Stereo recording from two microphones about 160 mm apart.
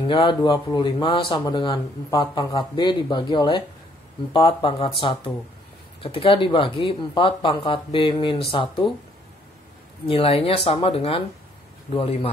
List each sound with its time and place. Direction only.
0.0 s speech: 30° left (ahead or behind)
6.0 s speech: 35° left (ahead or behind)
10.0 s speech: 35° left (ahead or behind)